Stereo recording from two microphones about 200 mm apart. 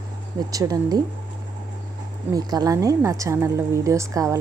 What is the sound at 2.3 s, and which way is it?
A woman's voice, 20° right (ahead or behind).